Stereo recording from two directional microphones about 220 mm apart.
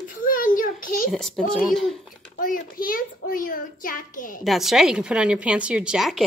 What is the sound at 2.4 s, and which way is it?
A child's voice, 40° left (ahead or behind).